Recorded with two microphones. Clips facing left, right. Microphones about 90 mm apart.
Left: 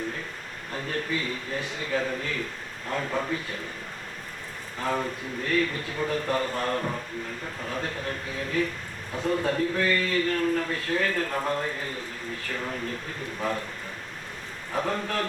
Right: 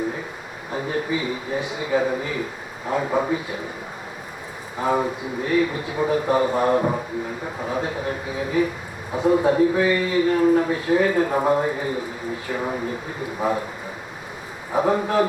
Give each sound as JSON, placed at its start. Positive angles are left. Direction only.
{"t": 0.7, "sound": "a man's voice", "side_deg": -15}
{"t": 4.8, "sound": "a man's voice", "side_deg": -10}
{"t": 14.7, "sound": "a man's voice", "side_deg": -15}